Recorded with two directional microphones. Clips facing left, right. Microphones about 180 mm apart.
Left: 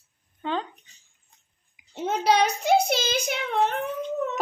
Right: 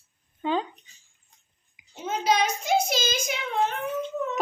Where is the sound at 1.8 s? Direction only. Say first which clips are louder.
Left 3 dB; 65° left (ahead or behind).